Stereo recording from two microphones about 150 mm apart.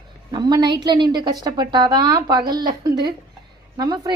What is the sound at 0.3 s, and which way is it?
A woman's voice, 30° right (ahead or behind).